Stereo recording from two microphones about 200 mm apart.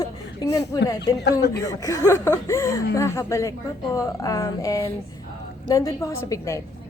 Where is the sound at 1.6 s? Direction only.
15° left (ahead or behind).